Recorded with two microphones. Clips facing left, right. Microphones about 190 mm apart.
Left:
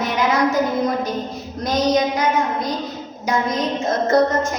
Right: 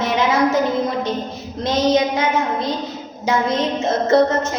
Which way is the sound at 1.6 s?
25° right (ahead or behind).